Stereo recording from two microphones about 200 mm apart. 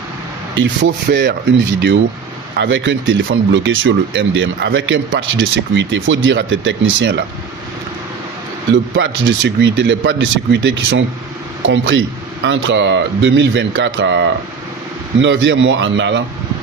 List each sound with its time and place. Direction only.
0.5 s speech: 65° right (ahead or behind)
8.7 s speech: 70° right (ahead or behind)